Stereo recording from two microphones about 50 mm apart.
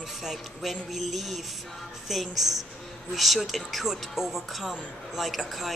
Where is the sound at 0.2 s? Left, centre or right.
Centre.